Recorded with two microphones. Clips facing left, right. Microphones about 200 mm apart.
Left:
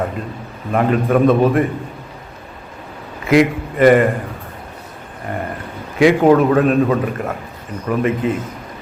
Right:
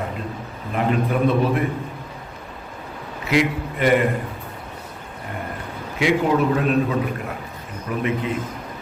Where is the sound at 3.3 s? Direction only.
50° left (ahead or behind).